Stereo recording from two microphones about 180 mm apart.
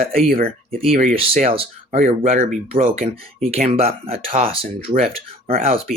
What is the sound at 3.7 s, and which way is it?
Speech, 35° right (ahead or behind).